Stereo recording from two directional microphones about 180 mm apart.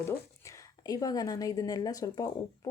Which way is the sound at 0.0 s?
15° left (ahead or behind).